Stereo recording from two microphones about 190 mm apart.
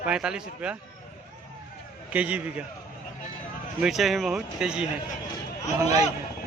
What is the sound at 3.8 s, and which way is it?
Speech, centre (ahead or behind).